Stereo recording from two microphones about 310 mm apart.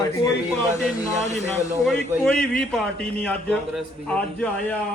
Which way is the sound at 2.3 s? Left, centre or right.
Centre.